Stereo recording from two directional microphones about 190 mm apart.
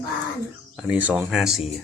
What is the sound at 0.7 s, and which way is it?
Speech, 5° right (ahead or behind).